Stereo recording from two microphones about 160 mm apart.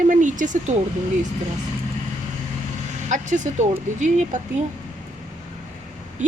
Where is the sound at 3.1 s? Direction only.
50° right (ahead or behind).